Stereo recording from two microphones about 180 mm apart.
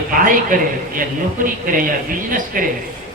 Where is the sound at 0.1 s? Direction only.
50° right (ahead or behind).